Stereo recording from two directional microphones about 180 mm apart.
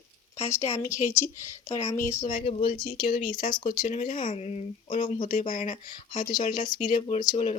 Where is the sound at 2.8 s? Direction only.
25° left (ahead or behind); by 5.8 s 45° left (ahead or behind).